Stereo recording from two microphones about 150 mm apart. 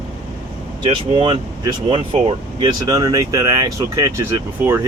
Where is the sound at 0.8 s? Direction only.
30° right (ahead or behind).